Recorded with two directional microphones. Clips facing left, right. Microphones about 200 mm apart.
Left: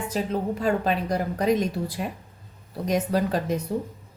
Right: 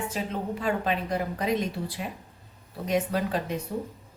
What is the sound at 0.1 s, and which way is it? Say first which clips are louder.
A woman's voice: left 5 dB; 40° left (ahead or behind).